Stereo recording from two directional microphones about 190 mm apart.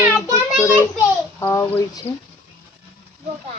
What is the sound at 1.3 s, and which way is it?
Speech, 15° left (ahead or behind).